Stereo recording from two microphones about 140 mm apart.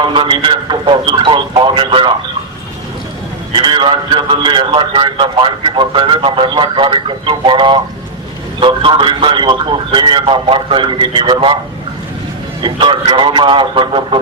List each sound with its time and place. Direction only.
0.0 s a man's voice: 35° right (ahead or behind)
3.5 s a man's voice: 35° right (ahead or behind)
12.6 s a man's voice: 35° right (ahead or behind)